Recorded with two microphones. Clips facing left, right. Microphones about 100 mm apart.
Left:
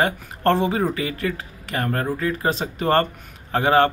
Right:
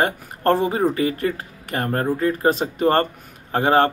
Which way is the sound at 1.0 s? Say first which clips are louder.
Right 4 dB; 35° right (ahead or behind).